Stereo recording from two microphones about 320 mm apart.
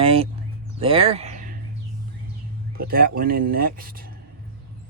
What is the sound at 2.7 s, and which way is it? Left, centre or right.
Speech, right.